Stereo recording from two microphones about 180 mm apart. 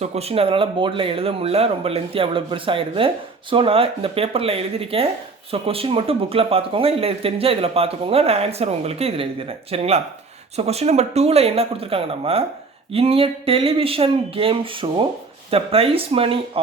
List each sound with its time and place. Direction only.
0.0 s speech: 35° right (ahead or behind)